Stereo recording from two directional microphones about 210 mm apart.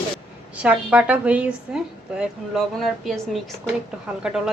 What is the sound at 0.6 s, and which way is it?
A woman's voice, 5° right (ahead or behind).